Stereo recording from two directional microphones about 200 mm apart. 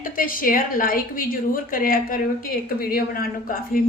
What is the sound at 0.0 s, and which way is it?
A woman's voice, 45° left (ahead or behind).